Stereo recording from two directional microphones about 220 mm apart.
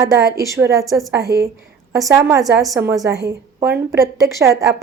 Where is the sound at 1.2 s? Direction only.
45° right (ahead or behind).